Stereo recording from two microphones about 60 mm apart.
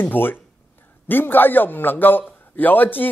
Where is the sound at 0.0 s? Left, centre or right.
Left.